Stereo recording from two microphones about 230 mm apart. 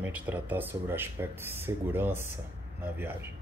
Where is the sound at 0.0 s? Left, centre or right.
Centre.